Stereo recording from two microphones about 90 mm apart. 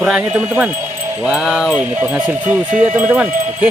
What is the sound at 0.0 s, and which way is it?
Wind chime, 10° right (ahead or behind).